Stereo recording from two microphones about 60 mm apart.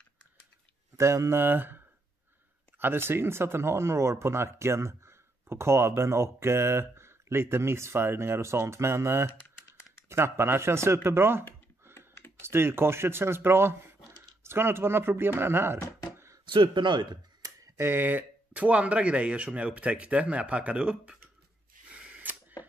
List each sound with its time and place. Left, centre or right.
0.9 s speech: right
1.4 s speech: right
2.8 s speech: right
17.7 s speech: right; by 21.2 s centre
21.9 s a sound: centre